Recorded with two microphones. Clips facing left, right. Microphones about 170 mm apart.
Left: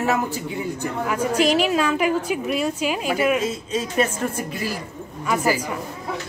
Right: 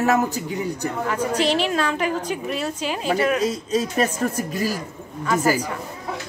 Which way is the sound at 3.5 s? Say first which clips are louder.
Right 3 dB; 40° right (ahead or behind).